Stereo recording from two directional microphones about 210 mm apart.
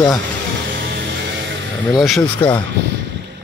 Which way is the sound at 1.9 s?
Centre (ahead or behind).